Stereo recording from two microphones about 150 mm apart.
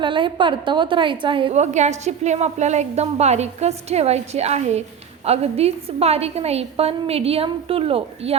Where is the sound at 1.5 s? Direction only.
50° right (ahead or behind).